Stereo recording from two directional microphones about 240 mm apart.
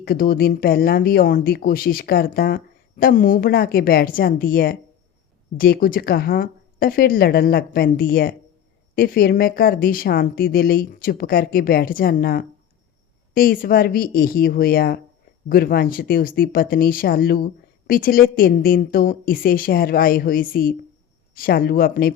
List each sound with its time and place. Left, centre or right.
0.0 s speech: left